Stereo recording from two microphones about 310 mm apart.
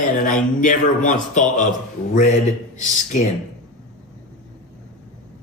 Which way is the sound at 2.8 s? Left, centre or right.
Left.